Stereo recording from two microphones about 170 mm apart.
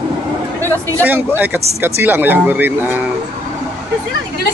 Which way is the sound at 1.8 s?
10° right (ahead or behind).